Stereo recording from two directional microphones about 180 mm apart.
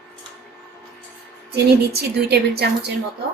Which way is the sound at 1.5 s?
65° right (ahead or behind).